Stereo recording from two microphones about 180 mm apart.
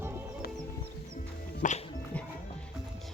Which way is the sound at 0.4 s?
60° left (ahead or behind).